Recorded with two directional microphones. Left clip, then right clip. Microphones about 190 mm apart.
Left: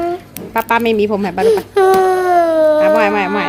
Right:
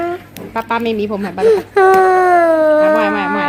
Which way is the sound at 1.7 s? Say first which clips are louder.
Right 3 dB; 10° right (ahead or behind).